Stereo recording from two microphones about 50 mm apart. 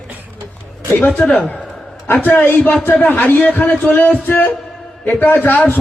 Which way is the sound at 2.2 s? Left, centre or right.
Left.